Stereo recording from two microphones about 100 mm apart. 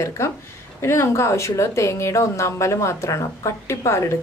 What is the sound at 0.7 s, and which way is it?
Speech, 25° left (ahead or behind).